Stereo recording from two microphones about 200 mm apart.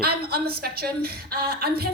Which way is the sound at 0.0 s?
50° right (ahead or behind).